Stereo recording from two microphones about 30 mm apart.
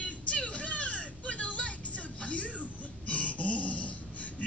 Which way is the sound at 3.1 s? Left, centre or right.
Left.